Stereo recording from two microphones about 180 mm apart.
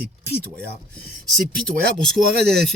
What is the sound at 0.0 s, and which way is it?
Speech, 60° right (ahead or behind).